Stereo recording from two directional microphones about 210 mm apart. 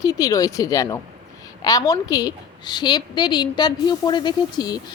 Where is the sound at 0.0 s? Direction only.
15° left (ahead or behind).